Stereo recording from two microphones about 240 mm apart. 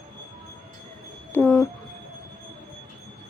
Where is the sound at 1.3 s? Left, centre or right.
Centre.